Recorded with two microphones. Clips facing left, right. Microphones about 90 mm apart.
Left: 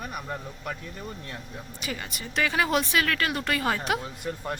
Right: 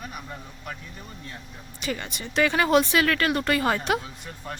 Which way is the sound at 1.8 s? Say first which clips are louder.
Right 5 dB; 5° left (ahead or behind).